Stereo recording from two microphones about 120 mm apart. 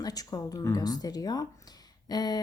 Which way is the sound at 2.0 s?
35° left (ahead or behind).